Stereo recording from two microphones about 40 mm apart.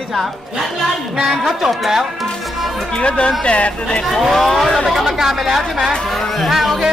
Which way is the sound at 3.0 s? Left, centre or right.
Left.